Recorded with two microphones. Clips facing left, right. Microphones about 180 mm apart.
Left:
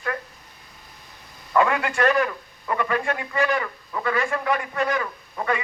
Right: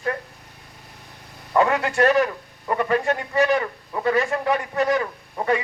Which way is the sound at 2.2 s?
35° right (ahead or behind).